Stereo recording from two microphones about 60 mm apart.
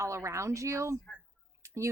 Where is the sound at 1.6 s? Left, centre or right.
Right.